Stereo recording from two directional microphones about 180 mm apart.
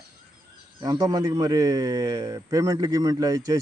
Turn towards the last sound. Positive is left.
turn(degrees=-20)  # may be behind; listen again after turning